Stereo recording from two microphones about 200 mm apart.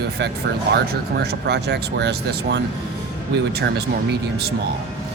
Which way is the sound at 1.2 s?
55° right (ahead or behind).